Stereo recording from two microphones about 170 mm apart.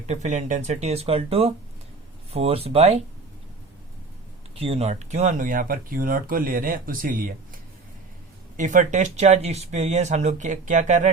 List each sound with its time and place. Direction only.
0.1 s speech: 45° right (ahead or behind)
4.6 s speech: 35° right (ahead or behind); by 7.3 s 55° right (ahead or behind)
8.5 s speech: 50° right (ahead or behind)